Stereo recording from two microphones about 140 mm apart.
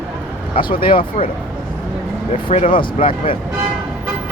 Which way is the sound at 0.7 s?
40° left (ahead or behind).